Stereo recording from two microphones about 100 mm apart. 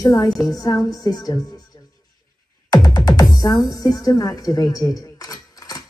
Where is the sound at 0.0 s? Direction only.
35° left (ahead or behind).